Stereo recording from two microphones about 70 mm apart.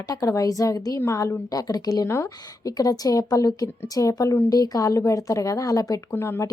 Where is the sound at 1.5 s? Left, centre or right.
Left.